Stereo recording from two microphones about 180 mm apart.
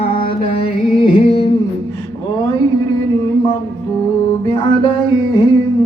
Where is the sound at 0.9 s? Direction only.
30° left (ahead or behind).